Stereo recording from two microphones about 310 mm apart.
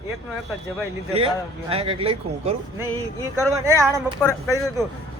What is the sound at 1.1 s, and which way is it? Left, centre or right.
Speech, centre.